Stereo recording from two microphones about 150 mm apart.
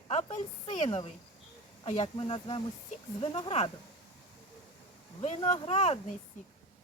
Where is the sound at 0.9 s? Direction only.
40° left (ahead or behind).